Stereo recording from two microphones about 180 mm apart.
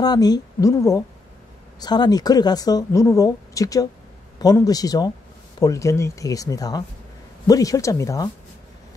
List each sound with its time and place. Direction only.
0.0 s a woman's voice: 20° left (ahead or behind)